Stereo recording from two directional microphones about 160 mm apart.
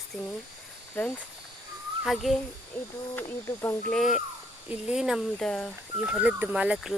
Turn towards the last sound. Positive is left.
turn(degrees=-5)  # may be behind; listen again after turning